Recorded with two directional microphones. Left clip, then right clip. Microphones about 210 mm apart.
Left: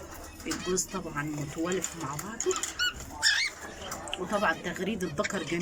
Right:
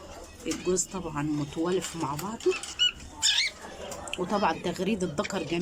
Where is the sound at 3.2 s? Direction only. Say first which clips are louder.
Right 1 dB; 15° right (ahead or behind).